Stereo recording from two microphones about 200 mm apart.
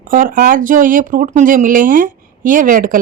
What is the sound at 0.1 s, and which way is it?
Speech, 45° right (ahead or behind).